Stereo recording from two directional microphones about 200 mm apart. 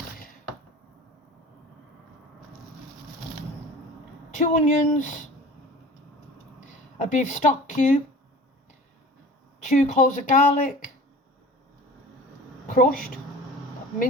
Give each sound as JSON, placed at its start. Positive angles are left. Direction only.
{"t": 4.4, "sound": "speech", "side_deg": 35}
{"t": 7.0, "sound": "speech", "side_deg": 40}
{"t": 9.6, "sound": "speech", "side_deg": 35}
{"t": 12.6, "sound": "a sound", "side_deg": 45}